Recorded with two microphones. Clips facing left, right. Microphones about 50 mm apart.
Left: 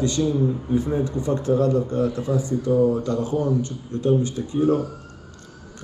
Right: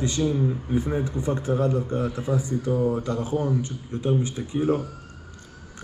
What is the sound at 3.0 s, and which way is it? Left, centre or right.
Speech, centre.